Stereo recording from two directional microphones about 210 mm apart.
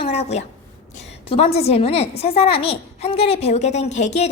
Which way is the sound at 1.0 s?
55° left (ahead or behind).